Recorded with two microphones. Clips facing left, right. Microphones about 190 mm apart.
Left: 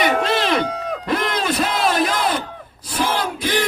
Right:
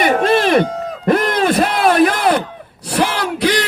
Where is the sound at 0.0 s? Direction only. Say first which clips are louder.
Right 5 dB; 50° right (ahead or behind).